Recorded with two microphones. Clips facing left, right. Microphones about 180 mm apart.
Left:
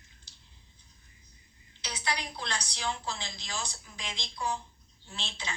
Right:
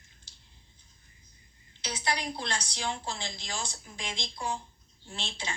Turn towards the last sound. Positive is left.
turn(degrees=-30)  # may be behind; listen again after turning